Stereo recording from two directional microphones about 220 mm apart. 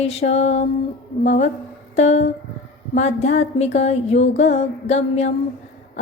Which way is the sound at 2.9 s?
30° left (ahead or behind).